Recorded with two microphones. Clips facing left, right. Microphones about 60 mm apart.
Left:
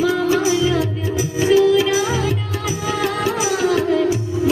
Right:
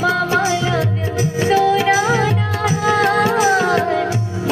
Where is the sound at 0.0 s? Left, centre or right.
Right.